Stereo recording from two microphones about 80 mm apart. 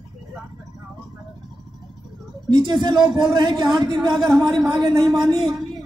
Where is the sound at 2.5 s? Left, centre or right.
Right.